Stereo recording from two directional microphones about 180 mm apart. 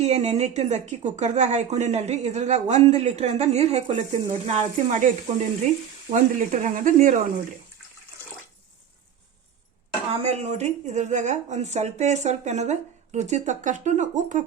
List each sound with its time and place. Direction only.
0.0 s speech: 40° right (ahead or behind)
10.1 s speech: 35° right (ahead or behind)